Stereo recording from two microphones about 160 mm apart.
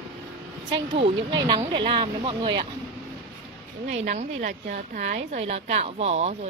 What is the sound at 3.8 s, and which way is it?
A woman's voice, 50° right (ahead or behind).